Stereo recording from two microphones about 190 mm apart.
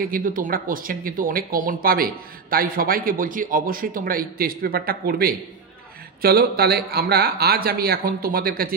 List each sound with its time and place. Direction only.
0.0 s speech: 45° right (ahead or behind)